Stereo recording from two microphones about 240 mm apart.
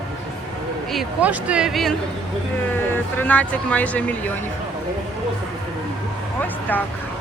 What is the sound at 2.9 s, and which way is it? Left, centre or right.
Speech, centre.